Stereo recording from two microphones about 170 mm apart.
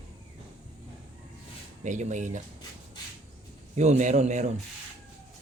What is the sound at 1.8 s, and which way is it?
Speech, 45° right (ahead or behind).